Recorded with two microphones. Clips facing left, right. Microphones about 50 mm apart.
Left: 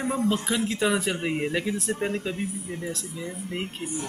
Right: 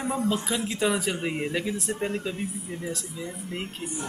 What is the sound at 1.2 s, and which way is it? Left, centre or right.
Speech, centre.